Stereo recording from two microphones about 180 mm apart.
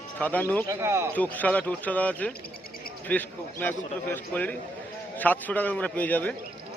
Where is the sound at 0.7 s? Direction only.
15° right (ahead or behind).